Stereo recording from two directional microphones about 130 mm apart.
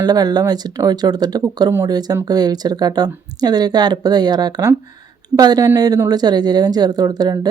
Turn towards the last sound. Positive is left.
turn(degrees=-30)  # may be behind; listen again after turning